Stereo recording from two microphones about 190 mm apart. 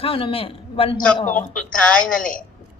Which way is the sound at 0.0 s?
30° left (ahead or behind).